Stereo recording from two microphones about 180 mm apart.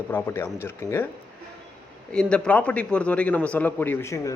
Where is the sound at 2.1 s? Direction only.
5° left (ahead or behind).